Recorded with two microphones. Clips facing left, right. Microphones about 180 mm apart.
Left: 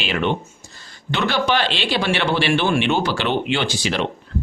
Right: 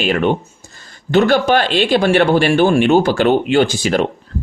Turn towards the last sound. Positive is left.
turn(degrees=-45)  # may be behind; listen again after turning